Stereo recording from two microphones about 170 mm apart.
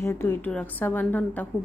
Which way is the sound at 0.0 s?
15° left (ahead or behind).